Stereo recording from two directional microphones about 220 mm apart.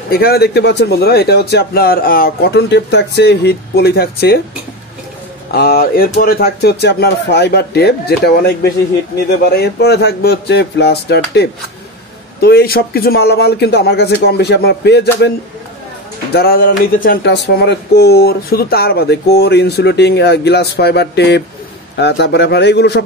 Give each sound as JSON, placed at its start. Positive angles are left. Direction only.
{"t": 0.1, "sound": "speech", "side_deg": 45}
{"t": 5.5, "sound": "speech", "side_deg": 45}
{"t": 16.3, "sound": "speech", "side_deg": 45}